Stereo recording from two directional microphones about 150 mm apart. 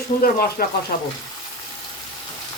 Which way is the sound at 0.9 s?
90° left.